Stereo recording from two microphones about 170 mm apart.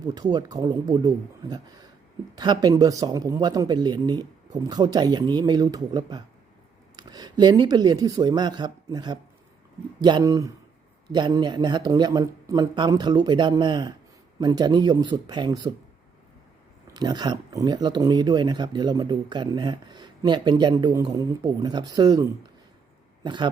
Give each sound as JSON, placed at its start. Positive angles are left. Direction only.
{"t": 0.0, "sound": "speech", "side_deg": -25}
{"t": 16.8, "sound": "speech", "side_deg": -25}